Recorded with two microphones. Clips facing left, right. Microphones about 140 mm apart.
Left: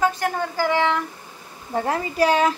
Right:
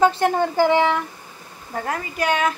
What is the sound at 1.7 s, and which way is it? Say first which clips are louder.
Speech: left 3 dB; 30° left (ahead or behind).